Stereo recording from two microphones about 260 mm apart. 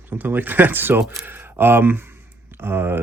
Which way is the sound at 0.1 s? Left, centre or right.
Centre.